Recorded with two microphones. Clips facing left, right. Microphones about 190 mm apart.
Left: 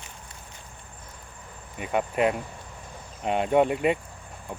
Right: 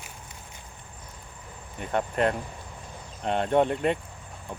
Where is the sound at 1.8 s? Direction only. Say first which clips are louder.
Left 1 dB; 10° left (ahead or behind).